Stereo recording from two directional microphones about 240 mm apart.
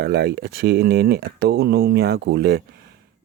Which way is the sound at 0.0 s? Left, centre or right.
Right.